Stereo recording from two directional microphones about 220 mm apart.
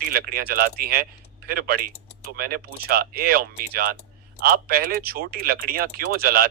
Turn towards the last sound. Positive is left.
turn(degrees=-45)  # may be behind; listen again after turning